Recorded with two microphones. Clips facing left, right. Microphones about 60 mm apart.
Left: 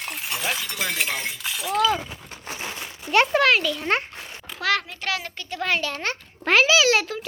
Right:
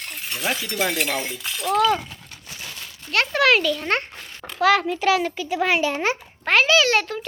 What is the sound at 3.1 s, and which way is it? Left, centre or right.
A child's voice, centre.